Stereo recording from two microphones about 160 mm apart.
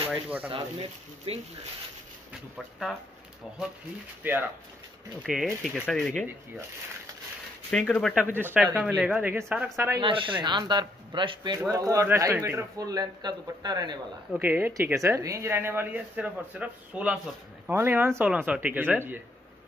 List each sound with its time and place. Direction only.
0.1 s a man's voice: 10° right (ahead or behind)
1.3 s speech: 35° right (ahead or behind)
2.5 s speech: centre (ahead or behind)
4.2 s a man's voice: 10° right (ahead or behind)
5.2 s speech: centre (ahead or behind)
7.7 s speech: 5° left (ahead or behind)
8.4 s a man's voice: 10° right (ahead or behind)
9.8 s a man's voice: 30° right (ahead or behind)
14.3 s a man's voice: 10° right (ahead or behind)